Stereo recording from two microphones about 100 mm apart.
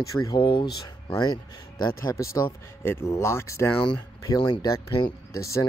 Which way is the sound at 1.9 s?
30° left (ahead or behind).